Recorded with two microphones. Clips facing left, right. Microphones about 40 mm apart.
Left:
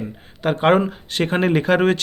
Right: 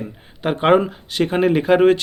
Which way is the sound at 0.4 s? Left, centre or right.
Centre.